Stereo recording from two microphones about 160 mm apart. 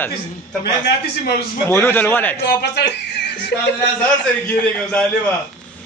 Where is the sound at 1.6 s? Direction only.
15° left (ahead or behind).